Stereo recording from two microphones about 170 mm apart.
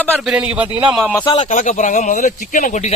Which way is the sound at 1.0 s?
Centre (ahead or behind).